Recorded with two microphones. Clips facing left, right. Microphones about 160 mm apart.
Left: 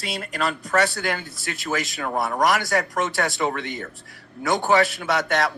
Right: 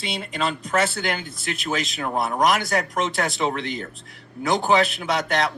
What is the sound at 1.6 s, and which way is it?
Speech, 20° right (ahead or behind).